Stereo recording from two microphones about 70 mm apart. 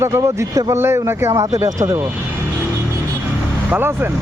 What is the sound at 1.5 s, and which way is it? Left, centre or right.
Speech, right.